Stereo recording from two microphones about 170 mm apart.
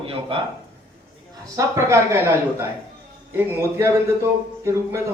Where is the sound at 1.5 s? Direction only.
20° right (ahead or behind).